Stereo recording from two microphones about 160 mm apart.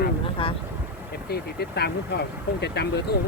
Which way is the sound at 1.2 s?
80° left.